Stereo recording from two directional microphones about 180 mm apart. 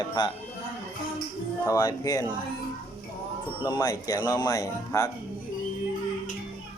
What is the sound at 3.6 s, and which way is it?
Speech, 20° left (ahead or behind).